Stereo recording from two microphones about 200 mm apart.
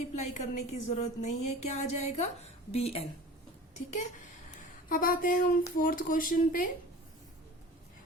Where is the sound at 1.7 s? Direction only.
30° left (ahead or behind).